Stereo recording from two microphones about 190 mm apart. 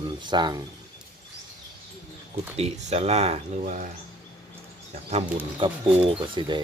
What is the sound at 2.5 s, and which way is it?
Speech, 35° right (ahead or behind).